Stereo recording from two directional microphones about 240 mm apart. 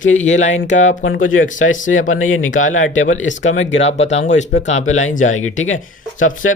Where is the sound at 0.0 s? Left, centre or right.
Left.